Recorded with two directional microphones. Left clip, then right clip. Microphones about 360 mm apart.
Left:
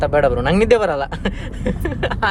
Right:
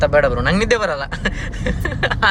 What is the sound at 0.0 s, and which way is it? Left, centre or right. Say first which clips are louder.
Speech: right 1 dB; centre.